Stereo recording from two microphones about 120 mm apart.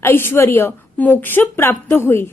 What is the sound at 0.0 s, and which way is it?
A woman's voice, 20° left (ahead or behind).